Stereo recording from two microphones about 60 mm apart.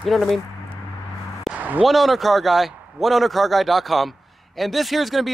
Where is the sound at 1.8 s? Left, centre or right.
Centre.